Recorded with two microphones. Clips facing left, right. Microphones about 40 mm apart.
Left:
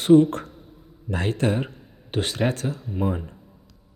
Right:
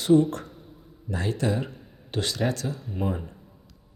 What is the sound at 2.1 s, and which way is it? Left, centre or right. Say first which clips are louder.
Speech: left 3 dB; left.